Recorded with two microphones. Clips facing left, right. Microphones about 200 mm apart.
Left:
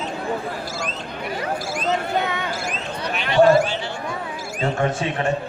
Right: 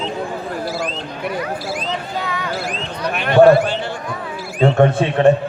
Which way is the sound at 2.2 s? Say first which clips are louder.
Left 1 dB; 25° left (ahead or behind).